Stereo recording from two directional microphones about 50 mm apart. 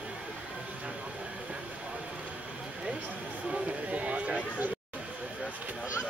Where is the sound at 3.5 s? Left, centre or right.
Right.